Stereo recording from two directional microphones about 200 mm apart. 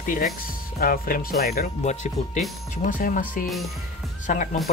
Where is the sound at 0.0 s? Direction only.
40° left (ahead or behind).